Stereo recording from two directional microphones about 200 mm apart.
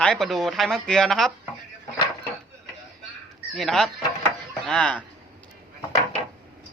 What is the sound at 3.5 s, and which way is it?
Speech, centre (ahead or behind).